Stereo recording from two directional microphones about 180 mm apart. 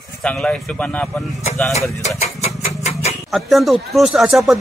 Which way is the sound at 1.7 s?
40° left (ahead or behind).